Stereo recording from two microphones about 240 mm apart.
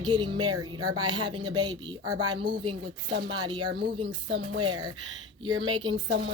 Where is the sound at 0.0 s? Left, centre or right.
Centre.